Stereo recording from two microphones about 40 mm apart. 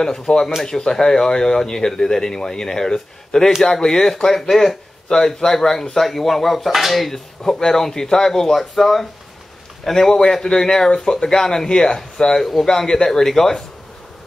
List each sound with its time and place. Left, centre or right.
0.0 s speech: centre
7.4 s speech: centre
10.1 s speech: centre